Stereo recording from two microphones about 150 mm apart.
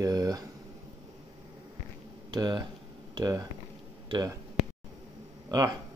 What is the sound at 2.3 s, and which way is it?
Speech, 25° right (ahead or behind).